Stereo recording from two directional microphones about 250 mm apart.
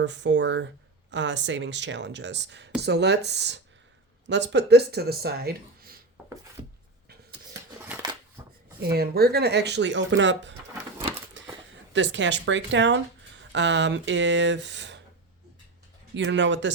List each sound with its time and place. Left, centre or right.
0.0 s speech: right
7.9 s a sound: centre
8.8 s speech: right
11.4 s a sound: right
11.9 s speech: right
16.1 s speech: right